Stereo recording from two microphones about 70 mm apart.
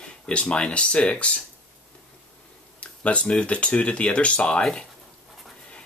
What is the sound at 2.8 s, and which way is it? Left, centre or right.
Speech, centre.